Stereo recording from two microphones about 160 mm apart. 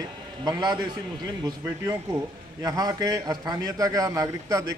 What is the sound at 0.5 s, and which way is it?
Speech, 25° right (ahead or behind).